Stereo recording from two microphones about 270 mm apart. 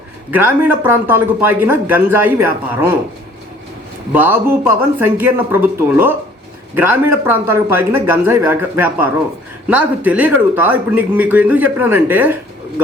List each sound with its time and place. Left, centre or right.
0.3 s a man's voice: centre
4.1 s a man's voice: centre